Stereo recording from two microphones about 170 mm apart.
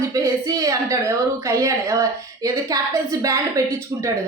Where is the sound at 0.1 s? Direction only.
20° right (ahead or behind).